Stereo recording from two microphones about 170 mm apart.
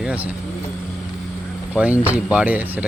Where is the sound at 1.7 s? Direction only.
10° right (ahead or behind).